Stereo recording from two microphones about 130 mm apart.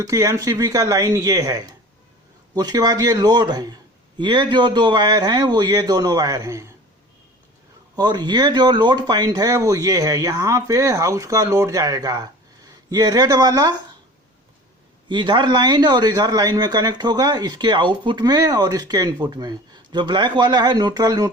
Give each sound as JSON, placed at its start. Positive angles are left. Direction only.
{"t": 0.0, "sound": "speech", "side_deg": -25}
{"t": 7.9, "sound": "speech", "side_deg": -35}
{"t": 15.1, "sound": "speech", "side_deg": -40}